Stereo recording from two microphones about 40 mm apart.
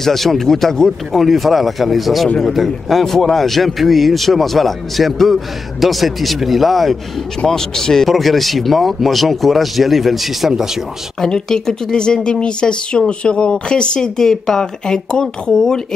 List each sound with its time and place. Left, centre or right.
0.0 s a man's voice: centre
1.1 s a man's voice: centre
7.4 s a man's voice: centre
8.1 s a man's voice: centre
11.1 s a woman's voice: centre